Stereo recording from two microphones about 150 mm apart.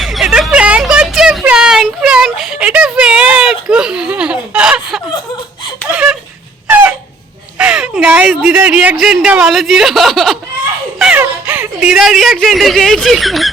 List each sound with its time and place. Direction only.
0.0 s a sound: centre (ahead or behind)
6.7 s chicken: 10° right (ahead or behind)
7.6 s speech: 5° right (ahead or behind)
11.0 s speech: 10° right (ahead or behind)